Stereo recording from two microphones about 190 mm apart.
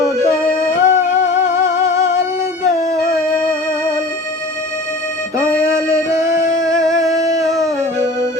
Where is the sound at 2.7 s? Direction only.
15° right (ahead or behind).